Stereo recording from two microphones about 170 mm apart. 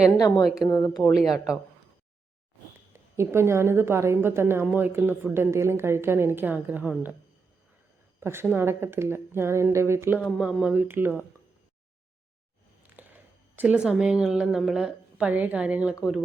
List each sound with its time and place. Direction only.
0.2 s speech: 25° left (ahead or behind)
1.0 s speech: centre (ahead or behind)
2.9 s a woman's voice: 15° right (ahead or behind)
8.2 s a woman's voice: 15° right (ahead or behind)
10.2 s a woman's voice: centre (ahead or behind)
12.9 s speech: 10° right (ahead or behind)